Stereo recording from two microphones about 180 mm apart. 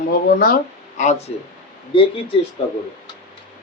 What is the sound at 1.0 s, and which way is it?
A man's voice, 40° left (ahead or behind).